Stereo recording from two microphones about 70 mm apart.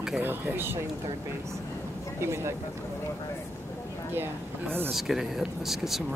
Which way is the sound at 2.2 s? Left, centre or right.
Right.